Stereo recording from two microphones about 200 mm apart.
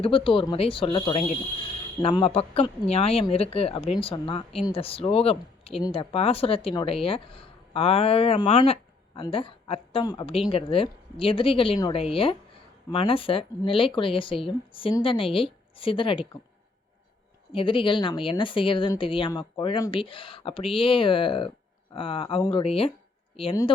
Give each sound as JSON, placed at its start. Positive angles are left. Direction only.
{"t": 0.0, "sound": "speech", "side_deg": 25}
{"t": 17.5, "sound": "speech", "side_deg": 25}